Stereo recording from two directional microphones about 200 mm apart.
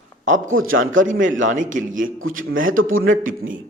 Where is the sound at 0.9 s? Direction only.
40° right (ahead or behind).